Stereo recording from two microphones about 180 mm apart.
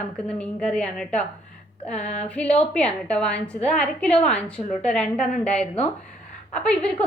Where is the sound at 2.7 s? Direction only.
5° left (ahead or behind).